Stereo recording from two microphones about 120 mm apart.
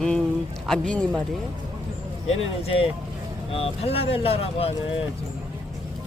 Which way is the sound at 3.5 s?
55° left (ahead or behind).